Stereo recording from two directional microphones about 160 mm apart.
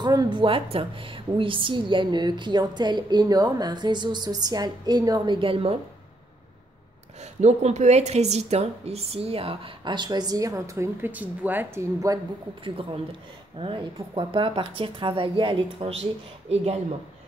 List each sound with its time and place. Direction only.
0.0 s a woman's voice: 25° right (ahead or behind)
7.2 s speech: 45° right (ahead or behind); by 12.2 s 20° right (ahead or behind)
12.6 s speech: 35° right (ahead or behind)